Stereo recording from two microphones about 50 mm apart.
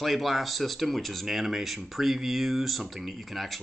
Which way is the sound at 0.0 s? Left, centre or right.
Centre.